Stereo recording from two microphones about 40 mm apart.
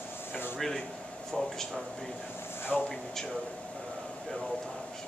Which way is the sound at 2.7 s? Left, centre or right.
Centre.